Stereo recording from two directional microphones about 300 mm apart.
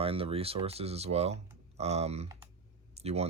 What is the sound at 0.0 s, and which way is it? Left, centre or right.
Speech, centre.